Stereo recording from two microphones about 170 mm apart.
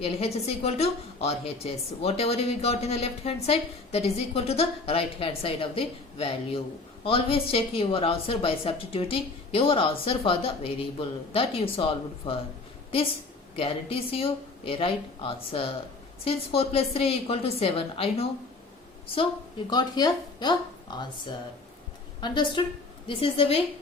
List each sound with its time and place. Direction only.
0.0 s a woman's voice: 35° left (ahead or behind)
13.6 s a woman's voice: 35° left (ahead or behind)
19.7 s speech: 25° left (ahead or behind)
22.2 s a woman's voice: 30° left (ahead or behind)